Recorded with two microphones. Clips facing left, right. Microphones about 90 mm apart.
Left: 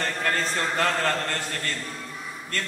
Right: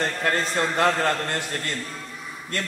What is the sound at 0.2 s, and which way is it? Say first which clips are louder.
Speech: right 2 dB; 20° right (ahead or behind).